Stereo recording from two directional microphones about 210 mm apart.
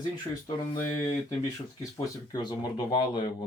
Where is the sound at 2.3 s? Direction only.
20° left (ahead or behind).